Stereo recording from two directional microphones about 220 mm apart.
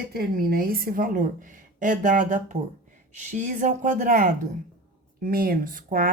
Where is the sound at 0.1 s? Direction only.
40° right (ahead or behind).